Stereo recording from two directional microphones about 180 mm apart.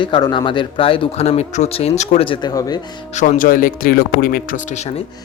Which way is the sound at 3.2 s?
50° left (ahead or behind).